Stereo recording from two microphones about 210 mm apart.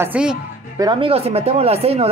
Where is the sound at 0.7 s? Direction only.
20° right (ahead or behind).